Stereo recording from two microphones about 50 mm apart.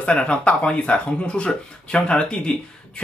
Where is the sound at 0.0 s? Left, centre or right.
Left.